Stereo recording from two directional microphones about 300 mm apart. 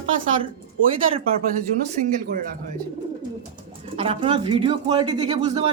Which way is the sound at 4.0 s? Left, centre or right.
Centre.